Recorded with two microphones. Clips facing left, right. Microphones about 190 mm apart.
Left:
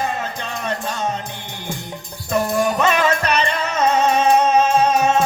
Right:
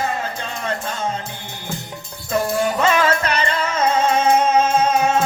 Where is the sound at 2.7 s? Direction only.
20° left (ahead or behind).